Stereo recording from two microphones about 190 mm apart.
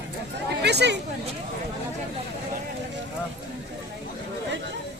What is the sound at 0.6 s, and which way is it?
Speech, 60° right (ahead or behind).